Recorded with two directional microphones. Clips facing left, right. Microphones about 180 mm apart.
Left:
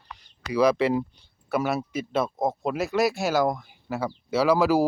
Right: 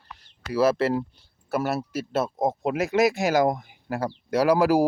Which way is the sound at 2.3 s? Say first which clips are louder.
Right 2 dB; 15° right (ahead or behind).